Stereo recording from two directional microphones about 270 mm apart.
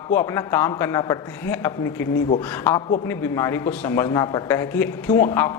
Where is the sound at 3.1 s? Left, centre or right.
Centre.